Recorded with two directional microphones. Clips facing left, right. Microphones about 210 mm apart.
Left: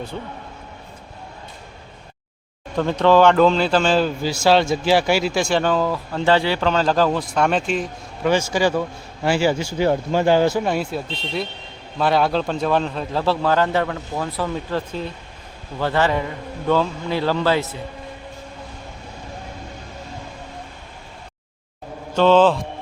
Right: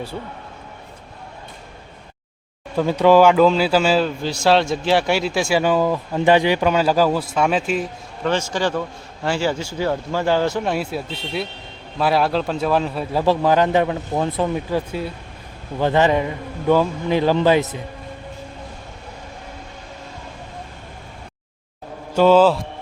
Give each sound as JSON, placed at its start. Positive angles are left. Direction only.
{"t": 2.7, "sound": "speech", "side_deg": -10}
{"t": 8.2, "sound": "a man's voice", "side_deg": 10}
{"t": 22.1, "sound": "a man's voice", "side_deg": -10}